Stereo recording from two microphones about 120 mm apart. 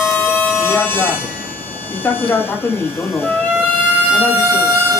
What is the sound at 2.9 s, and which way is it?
Speech, centre (ahead or behind).